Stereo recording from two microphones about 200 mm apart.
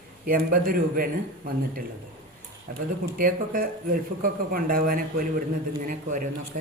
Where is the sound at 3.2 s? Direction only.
45° right (ahead or behind).